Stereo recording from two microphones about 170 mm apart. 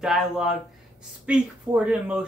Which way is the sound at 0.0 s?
Centre (ahead or behind).